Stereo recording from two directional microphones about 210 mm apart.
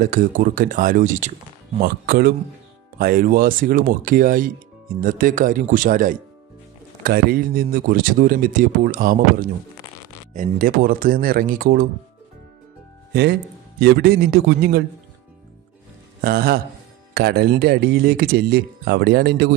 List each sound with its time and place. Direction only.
0.0 s speech: 40° right (ahead or behind)
13.7 s speech: 50° right (ahead or behind)
16.2 s speech: 45° right (ahead or behind)